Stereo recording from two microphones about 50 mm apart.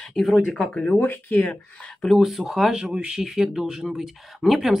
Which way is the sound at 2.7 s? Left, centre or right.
Centre.